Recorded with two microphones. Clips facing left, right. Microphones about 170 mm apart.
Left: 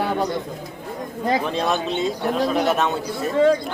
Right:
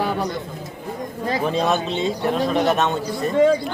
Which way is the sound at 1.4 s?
Centre (ahead or behind).